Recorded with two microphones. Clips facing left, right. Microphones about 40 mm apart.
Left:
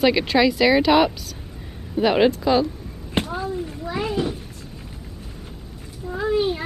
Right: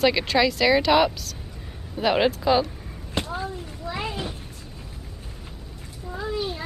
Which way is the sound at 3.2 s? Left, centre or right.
Left.